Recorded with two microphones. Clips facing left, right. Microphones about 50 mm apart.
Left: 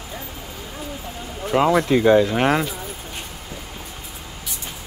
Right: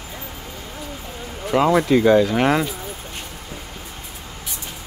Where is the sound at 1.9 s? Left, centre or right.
Left.